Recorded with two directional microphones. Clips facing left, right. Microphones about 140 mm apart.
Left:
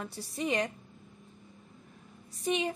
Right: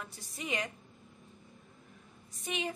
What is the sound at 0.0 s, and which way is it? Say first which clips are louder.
Speech: left 8 dB; 30° left (ahead or behind).